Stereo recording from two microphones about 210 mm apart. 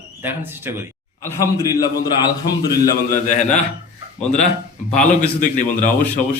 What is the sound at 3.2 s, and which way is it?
Speech, 35° left (ahead or behind).